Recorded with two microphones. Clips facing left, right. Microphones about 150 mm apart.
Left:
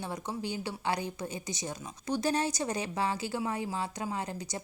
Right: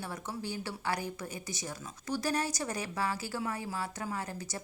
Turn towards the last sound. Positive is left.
turn(degrees=20)  # may be behind; listen again after turning